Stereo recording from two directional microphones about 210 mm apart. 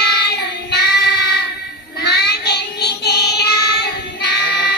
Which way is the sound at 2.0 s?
50° left (ahead or behind).